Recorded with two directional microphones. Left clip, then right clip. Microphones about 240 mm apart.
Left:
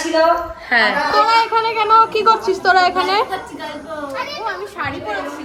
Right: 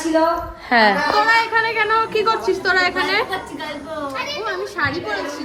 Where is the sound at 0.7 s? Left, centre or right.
Right.